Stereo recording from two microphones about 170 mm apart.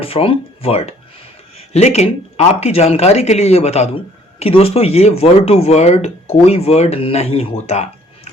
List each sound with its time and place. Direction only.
0.0 s speech: 35° left (ahead or behind)